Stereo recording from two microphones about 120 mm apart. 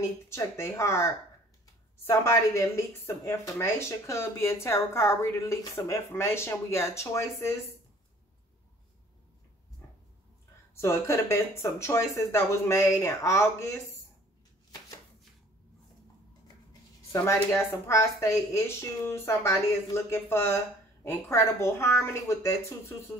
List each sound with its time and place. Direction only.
0.3 s a woman's voice: 25° left (ahead or behind)
10.8 s a woman's voice: 25° left (ahead or behind)
17.1 s a woman's voice: 20° left (ahead or behind)